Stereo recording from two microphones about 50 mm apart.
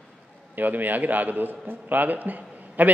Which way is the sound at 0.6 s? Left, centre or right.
Right.